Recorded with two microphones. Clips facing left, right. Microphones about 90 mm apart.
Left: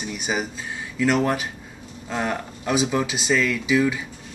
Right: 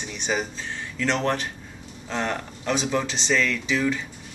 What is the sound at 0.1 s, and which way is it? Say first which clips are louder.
Speech: even; 10° left (ahead or behind).